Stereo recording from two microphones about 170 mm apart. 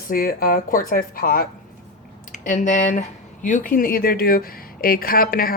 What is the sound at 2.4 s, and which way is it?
Speech, 50° left (ahead or behind).